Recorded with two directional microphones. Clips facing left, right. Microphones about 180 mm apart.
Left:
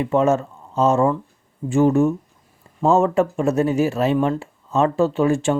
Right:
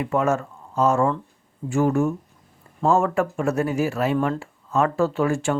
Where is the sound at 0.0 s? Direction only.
25° left (ahead or behind).